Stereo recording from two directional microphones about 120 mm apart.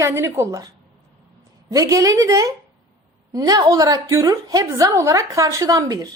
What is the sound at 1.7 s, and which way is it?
A woman's voice, 30° right (ahead or behind).